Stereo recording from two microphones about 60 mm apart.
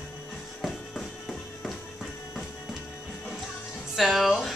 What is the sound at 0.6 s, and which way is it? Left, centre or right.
Music, centre.